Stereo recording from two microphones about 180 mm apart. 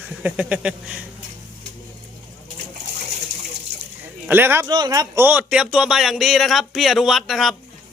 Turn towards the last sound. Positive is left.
turn(degrees=0)  # may be behind; listen again after turning